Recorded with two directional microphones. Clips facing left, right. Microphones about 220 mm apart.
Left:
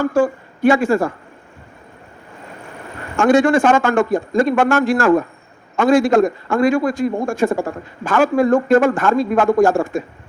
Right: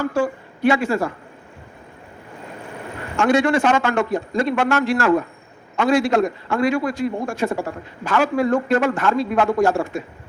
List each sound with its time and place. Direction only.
0.0 s a man's voice: 50° left (ahead or behind)
3.2 s a man's voice: 50° left (ahead or behind)